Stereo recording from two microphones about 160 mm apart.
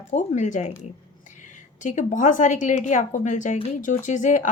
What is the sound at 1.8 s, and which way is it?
A woman's voice, 50° left (ahead or behind).